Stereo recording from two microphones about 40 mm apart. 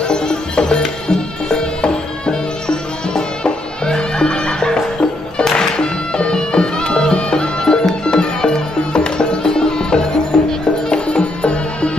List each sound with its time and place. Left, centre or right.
0.0 s music: left
10.9 s music: left